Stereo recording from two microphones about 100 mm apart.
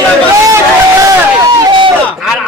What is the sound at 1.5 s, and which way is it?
Speech, 40° right (ahead or behind).